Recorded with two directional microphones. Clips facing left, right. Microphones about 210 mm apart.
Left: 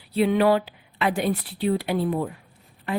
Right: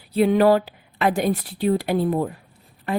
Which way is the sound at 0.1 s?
45° right (ahead or behind).